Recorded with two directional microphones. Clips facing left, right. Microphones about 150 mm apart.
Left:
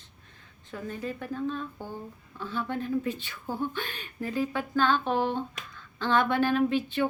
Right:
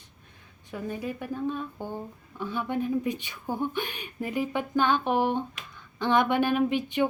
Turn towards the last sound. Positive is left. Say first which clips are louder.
# even
turn(degrees=-15)  # may be behind; listen again after turning